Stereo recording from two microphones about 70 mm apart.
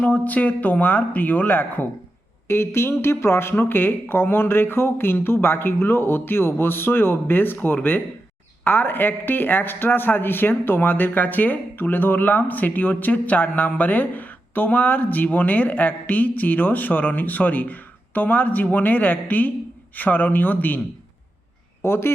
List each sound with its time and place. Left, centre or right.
0.1 s speech: left
21.8 s speech: left